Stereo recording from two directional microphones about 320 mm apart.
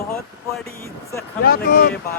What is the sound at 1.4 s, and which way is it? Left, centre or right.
Speech, left.